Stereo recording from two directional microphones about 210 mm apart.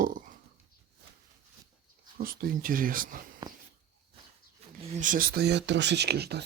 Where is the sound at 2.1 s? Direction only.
45° right (ahead or behind).